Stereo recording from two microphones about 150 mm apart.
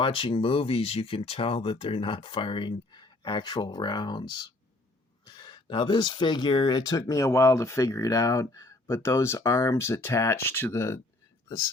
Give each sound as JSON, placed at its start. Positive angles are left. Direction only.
{"t": 0.0, "sound": "speech", "side_deg": 35}